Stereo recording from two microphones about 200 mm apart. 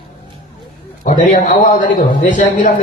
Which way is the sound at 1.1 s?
40° left (ahead or behind).